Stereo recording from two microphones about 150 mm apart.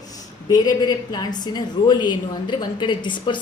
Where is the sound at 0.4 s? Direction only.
25° left (ahead or behind).